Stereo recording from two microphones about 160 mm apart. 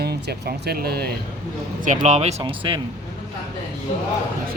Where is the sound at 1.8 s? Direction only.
45° right (ahead or behind).